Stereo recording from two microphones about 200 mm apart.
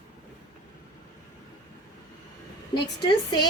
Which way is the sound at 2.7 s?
20° left (ahead or behind).